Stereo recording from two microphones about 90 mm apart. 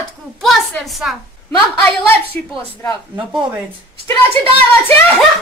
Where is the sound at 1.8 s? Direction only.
20° left (ahead or behind).